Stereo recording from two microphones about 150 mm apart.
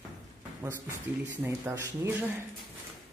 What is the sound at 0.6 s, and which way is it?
Speech, 15° right (ahead or behind).